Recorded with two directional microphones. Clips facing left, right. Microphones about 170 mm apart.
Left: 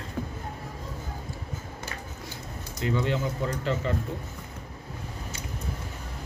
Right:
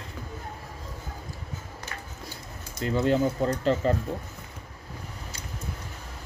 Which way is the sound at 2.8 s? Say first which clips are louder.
Right 4 dB; 40° right (ahead or behind).